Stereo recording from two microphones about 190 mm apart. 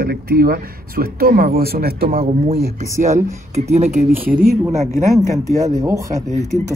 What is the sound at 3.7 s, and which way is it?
Speech, 35° right (ahead or behind).